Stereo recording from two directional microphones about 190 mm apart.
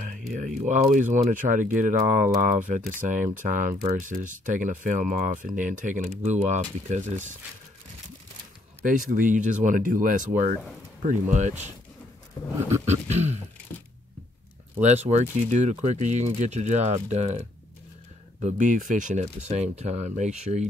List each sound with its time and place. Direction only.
0.7 s speech: 40° right (ahead or behind)
8.8 s speech: 45° right (ahead or behind)
12.6 s speech: 35° right (ahead or behind)
14.8 s speech: 35° right (ahead or behind)